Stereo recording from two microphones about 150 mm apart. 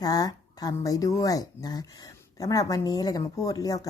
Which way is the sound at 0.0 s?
25° left (ahead or behind).